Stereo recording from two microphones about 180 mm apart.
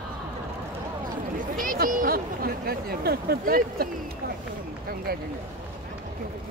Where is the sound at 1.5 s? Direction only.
50° right (ahead or behind).